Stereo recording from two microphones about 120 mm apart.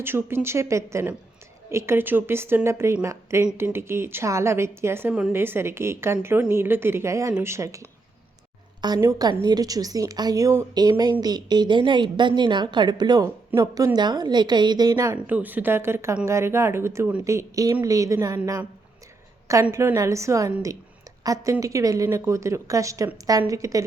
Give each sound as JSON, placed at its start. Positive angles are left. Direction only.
{"t": 0.0, "sound": "a woman's voice", "side_deg": -20}
{"t": 15.1, "sound": "a woman's voice", "side_deg": -15}
{"t": 19.5, "sound": "a woman's voice", "side_deg": -25}